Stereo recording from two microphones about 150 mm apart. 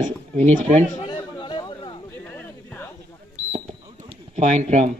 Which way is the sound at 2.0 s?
10° left (ahead or behind).